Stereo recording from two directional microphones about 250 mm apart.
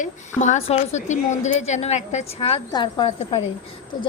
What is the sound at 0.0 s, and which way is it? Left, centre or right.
A woman's voice, left.